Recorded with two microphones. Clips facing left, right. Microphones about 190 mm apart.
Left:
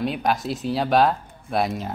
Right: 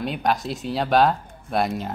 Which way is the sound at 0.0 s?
Centre (ahead or behind).